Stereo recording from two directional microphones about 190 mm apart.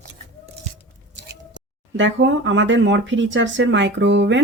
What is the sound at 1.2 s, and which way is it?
Speech, 70° right (ahead or behind).